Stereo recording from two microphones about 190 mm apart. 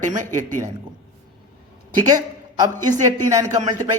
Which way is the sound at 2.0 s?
20° right (ahead or behind).